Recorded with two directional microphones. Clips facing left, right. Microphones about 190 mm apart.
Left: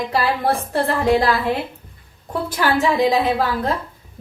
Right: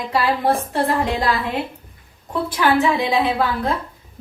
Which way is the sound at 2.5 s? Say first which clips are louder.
Right 1 dB; 45° left (ahead or behind).